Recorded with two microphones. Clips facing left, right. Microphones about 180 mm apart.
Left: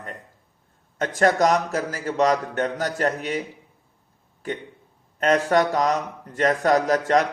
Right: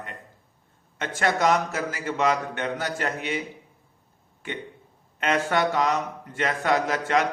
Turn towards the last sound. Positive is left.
turn(degrees=40)  # may be behind; listen again after turning